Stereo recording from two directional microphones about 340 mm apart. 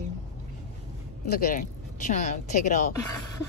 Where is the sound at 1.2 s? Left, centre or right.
Left.